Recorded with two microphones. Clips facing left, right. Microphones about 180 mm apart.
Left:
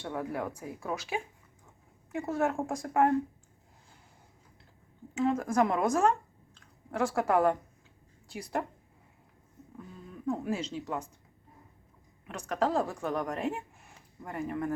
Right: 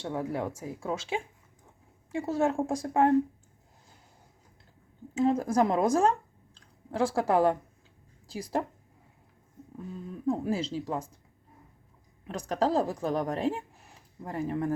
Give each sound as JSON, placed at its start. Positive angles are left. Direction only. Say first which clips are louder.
{"t": 0.1, "sound": "speech", "louder": "right 2 dB", "side_deg": -25}
{"t": 2.2, "sound": "speech", "louder": "right 3 dB", "side_deg": -25}
{"t": 5.1, "sound": "a woman's voice", "louder": "right 2 dB", "side_deg": -35}
{"t": 10.2, "sound": "a woman's voice", "louder": "right 3 dB", "side_deg": -30}
{"t": 12.3, "sound": "speech", "louder": "right 2 dB", "side_deg": -35}